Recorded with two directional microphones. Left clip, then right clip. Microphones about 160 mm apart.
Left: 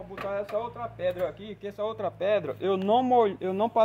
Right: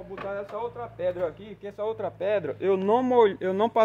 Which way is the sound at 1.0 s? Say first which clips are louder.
Right 1 dB; 25° right (ahead or behind).